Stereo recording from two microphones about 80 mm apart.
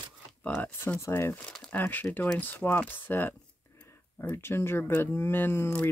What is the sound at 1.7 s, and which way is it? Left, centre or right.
Speech, left.